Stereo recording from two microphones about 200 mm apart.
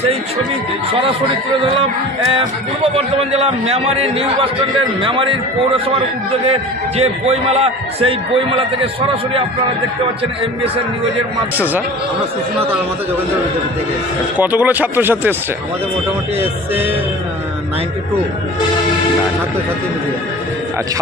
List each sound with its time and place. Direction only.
1.6 s a man's voice: 25° right (ahead or behind)
6.4 s a man's voice: 30° right (ahead or behind)
11.5 s speech: 10° right (ahead or behind)
14.3 s speech: 10° right (ahead or behind)
16.3 s speech: 10° right (ahead or behind)